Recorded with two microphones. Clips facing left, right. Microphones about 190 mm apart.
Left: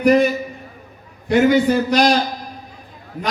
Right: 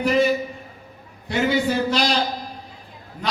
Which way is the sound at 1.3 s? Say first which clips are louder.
Left 7 dB; 50° left (ahead or behind).